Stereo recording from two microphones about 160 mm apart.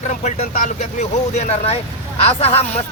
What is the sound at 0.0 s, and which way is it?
Speech, 50° left (ahead or behind).